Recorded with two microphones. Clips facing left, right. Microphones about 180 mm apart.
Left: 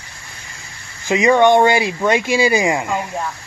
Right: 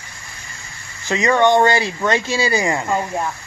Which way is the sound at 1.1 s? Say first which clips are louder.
Left 3 dB; 15° left (ahead or behind).